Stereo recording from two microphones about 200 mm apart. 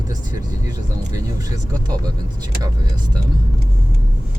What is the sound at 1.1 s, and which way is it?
Speech, 15° right (ahead or behind).